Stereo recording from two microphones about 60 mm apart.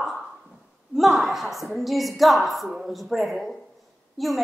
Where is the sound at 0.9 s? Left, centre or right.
Centre.